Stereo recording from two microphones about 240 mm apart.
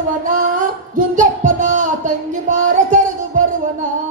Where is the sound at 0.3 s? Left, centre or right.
Right.